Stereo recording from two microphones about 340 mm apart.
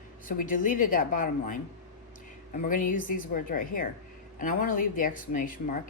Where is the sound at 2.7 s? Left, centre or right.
Left.